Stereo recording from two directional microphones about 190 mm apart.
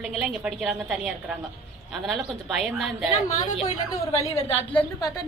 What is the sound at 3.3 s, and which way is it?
A woman's voice, 35° left (ahead or behind).